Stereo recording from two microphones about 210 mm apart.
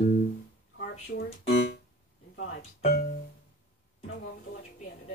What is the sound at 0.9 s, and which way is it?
Speech, 45° left (ahead or behind).